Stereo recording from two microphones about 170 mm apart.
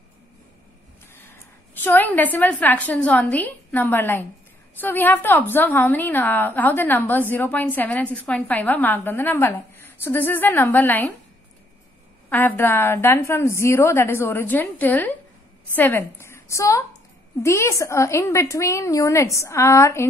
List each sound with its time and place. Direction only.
1.3 s a woman's voice: 10° left (ahead or behind)
12.3 s a woman's voice: 10° left (ahead or behind)